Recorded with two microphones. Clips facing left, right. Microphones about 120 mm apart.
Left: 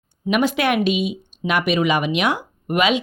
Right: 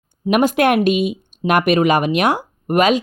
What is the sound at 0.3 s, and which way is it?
Speech, 50° right (ahead or behind).